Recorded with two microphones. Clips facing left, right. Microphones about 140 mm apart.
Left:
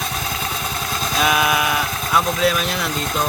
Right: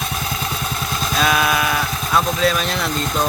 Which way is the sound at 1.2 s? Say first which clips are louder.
Even; 15° left (ahead or behind).